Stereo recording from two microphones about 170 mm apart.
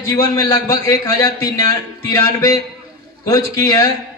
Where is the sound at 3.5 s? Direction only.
20° left (ahead or behind).